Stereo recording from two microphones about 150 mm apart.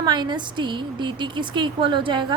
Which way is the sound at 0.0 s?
30° right (ahead or behind).